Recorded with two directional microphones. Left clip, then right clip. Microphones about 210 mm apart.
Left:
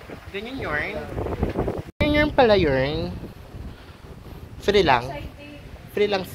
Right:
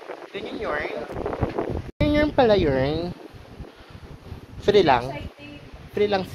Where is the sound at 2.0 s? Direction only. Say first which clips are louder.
Left 1 dB; 10° right (ahead or behind).